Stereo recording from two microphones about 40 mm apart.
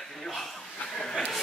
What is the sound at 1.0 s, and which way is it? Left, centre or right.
Speech, centre.